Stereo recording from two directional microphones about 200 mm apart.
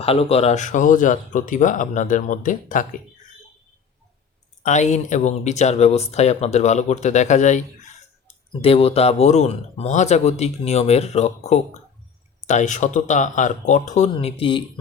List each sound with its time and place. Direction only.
0.0 s speech: 30° left (ahead or behind)
4.6 s speech: 35° left (ahead or behind)
8.6 s speech: 30° left (ahead or behind)